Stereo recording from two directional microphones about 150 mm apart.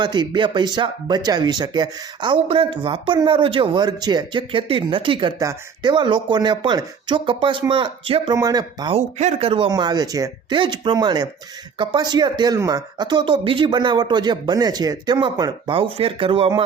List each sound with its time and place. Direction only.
0.0 s speech: 30° right (ahead or behind)
8.4 s speech: 25° right (ahead or behind)
8.9 s speech: 45° right (ahead or behind); by 15.7 s 30° right (ahead or behind)
15.7 s speech: 40° right (ahead or behind)